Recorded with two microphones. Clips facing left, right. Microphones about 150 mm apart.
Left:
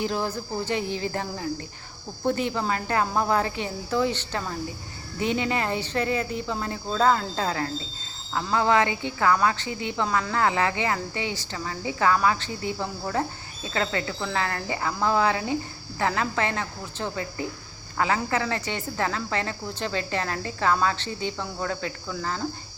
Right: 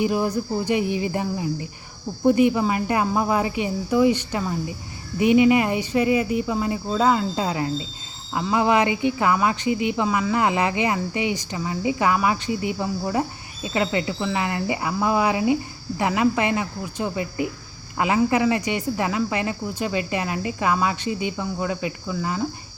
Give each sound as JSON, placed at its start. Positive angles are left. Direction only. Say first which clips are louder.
{"t": 0.0, "sound": "speech", "louder": "right 6 dB", "side_deg": -10}